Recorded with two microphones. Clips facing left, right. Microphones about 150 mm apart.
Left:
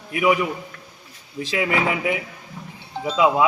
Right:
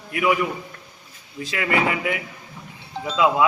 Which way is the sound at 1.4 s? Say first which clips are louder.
Even; 20° left (ahead or behind).